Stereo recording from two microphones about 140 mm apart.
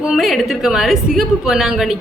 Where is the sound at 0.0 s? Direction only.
Centre (ahead or behind).